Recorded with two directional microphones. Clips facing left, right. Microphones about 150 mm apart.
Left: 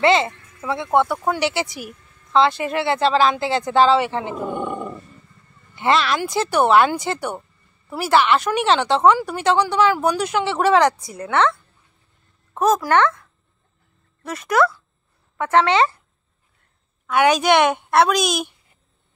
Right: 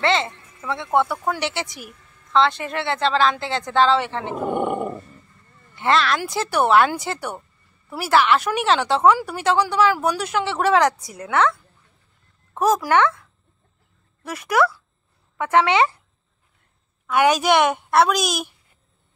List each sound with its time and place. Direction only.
0.0 s a woman's voice: 10° left (ahead or behind)
4.4 s dog: 20° right (ahead or behind)
5.8 s speech: 5° left (ahead or behind)
12.5 s speech: 10° right (ahead or behind)
17.0 s speech: 5° right (ahead or behind)